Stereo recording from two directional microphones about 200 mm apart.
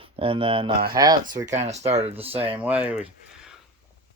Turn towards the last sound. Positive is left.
turn(degrees=-5)  # may be behind; listen again after turning